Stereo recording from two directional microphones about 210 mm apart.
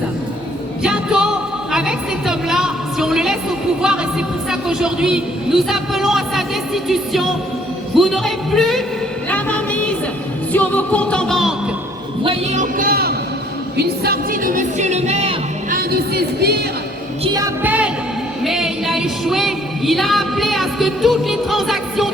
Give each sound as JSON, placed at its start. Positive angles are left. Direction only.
{"t": 0.8, "sound": "music", "side_deg": -5}
{"t": 10.5, "sound": "music", "side_deg": 5}
{"t": 12.2, "sound": "speech", "side_deg": -30}
{"t": 15.7, "sound": "speech", "side_deg": -45}
{"t": 17.2, "sound": "music", "side_deg": -15}